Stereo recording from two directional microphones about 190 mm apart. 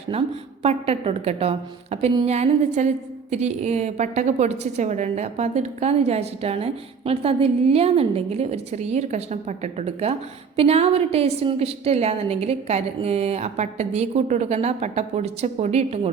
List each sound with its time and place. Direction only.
0.1 s a woman's voice: 30° right (ahead or behind)